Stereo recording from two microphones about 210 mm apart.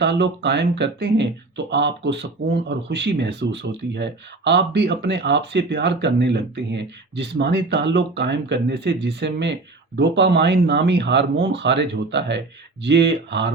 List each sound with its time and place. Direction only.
0.0 s speech: 55° right (ahead or behind)